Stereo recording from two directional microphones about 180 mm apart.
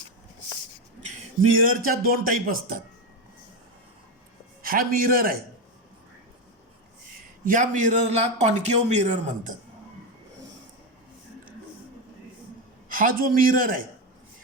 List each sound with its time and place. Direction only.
1.5 s a man's voice: 50° right (ahead or behind)
4.6 s a man's voice: 55° right (ahead or behind)
7.4 s a man's voice: 45° right (ahead or behind)
12.9 s a man's voice: 50° right (ahead or behind)